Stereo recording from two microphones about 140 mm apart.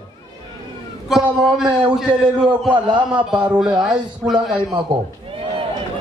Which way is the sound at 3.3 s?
5° right (ahead or behind).